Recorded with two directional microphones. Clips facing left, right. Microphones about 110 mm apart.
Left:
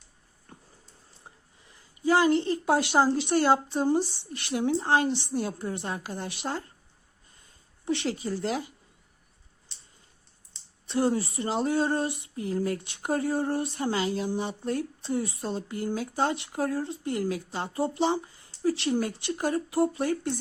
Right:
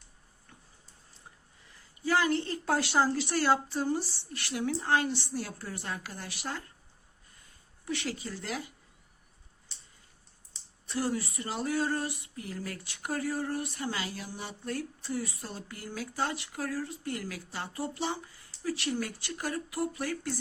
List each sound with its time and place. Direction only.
0.5 s a sound: 35° left (ahead or behind)
1.8 s speech: 20° left (ahead or behind)
7.9 s speech: 25° left (ahead or behind)
10.8 s speech: 25° left (ahead or behind)